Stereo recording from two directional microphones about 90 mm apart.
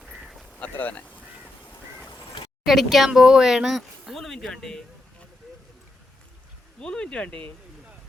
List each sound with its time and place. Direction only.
0.0 s quack: centre (ahead or behind)
0.5 s speech: 15° left (ahead or behind)
1.0 s duck: 15° right (ahead or behind)
2.6 s speech: centre (ahead or behind)
6.7 s speech: 10° left (ahead or behind)